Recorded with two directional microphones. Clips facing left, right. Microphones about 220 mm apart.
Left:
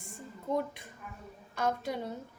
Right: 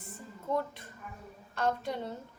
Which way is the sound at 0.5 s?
15° left (ahead or behind).